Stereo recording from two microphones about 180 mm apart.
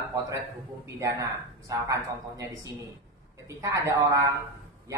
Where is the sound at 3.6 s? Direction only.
20° right (ahead or behind).